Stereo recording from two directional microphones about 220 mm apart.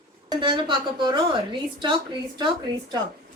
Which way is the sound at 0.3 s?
20° right (ahead or behind).